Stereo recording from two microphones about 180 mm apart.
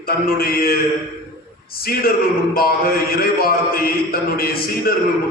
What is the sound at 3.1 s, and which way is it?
A man's voice, 55° left (ahead or behind).